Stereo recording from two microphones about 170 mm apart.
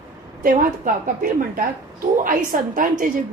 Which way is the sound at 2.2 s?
55° right (ahead or behind).